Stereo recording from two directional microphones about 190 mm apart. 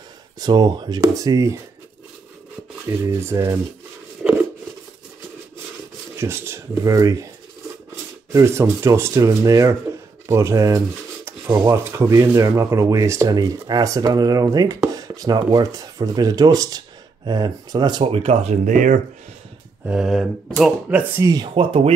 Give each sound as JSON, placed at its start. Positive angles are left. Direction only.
{"t": 0.4, "sound": "speech", "side_deg": -20}
{"t": 2.9, "sound": "speech", "side_deg": -15}
{"t": 6.1, "sound": "speech", "side_deg": -15}
{"t": 8.3, "sound": "speech", "side_deg": -15}
{"t": 19.9, "sound": "speech", "side_deg": -5}
{"t": 21.2, "sound": "speech", "side_deg": -20}